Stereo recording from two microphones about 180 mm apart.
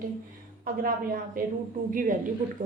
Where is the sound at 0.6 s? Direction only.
50° right (ahead or behind).